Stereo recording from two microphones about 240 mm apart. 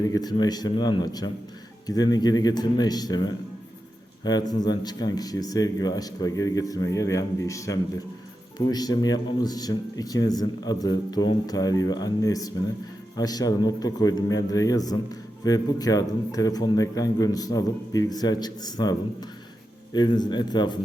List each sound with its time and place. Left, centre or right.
0.0 s speech: centre